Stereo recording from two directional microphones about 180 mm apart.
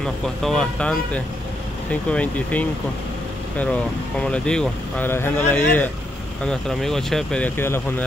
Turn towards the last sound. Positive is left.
turn(degrees=10)  # may be behind; listen again after turning